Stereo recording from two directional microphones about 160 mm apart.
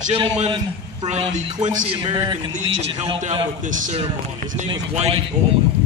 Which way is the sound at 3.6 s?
55° right (ahead or behind).